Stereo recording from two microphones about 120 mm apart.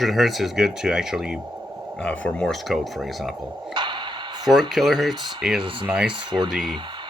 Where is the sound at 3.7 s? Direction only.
40° right (ahead or behind).